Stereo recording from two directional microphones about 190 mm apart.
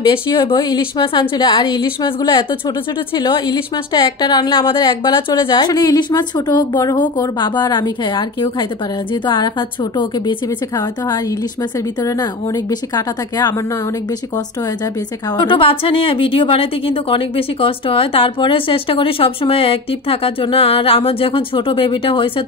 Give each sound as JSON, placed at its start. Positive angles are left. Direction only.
{"t": 0.1, "sound": "a woman's voice", "side_deg": 25}
{"t": 12.0, "sound": "a woman's voice", "side_deg": 20}
{"t": 15.3, "sound": "a woman's voice", "side_deg": 25}